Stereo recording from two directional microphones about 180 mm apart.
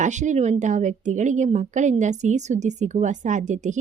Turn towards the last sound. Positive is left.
turn(degrees=-45)  # may be behind; listen again after turning